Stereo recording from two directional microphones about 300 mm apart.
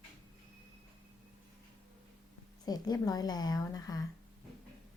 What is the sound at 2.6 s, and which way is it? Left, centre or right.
Speech, centre.